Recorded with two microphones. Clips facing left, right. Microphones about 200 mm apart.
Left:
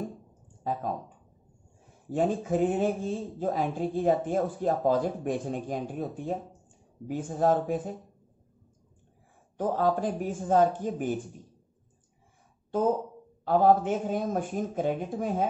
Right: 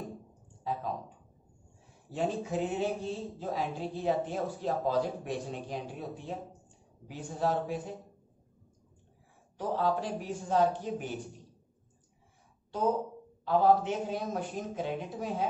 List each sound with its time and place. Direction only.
0.7 s speech: 50° left (ahead or behind)
9.6 s speech: 50° left (ahead or behind)
13.5 s speech: 50° left (ahead or behind)